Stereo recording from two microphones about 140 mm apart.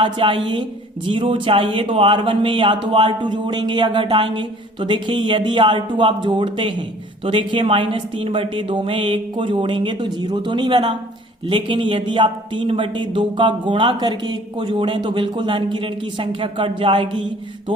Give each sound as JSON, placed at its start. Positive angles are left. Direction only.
{"t": 0.0, "sound": "speech", "side_deg": -35}